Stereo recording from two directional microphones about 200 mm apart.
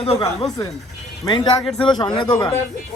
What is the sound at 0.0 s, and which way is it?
A man's voice, 30° left (ahead or behind).